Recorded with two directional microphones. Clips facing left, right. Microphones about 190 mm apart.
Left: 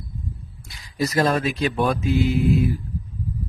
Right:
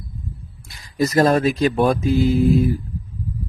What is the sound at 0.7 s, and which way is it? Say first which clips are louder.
A man's voice: right 4 dB; 45° right (ahead or behind).